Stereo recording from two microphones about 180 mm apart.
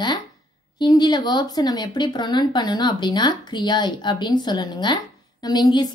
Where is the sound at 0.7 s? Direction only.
25° left (ahead or behind).